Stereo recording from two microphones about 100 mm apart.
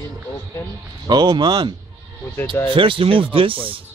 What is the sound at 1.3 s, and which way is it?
Speech, 45° right (ahead or behind).